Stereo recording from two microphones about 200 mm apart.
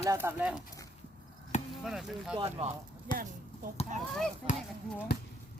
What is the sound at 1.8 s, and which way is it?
Speech, centre (ahead or behind).